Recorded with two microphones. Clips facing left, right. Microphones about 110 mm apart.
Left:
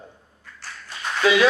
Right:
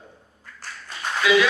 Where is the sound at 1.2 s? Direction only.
35° left (ahead or behind).